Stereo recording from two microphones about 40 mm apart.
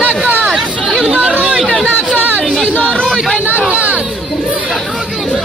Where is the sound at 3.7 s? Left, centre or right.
Right.